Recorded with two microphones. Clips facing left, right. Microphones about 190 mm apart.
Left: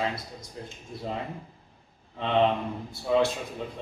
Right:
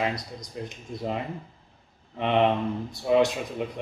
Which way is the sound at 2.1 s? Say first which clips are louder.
Right 2 dB; 15° right (ahead or behind).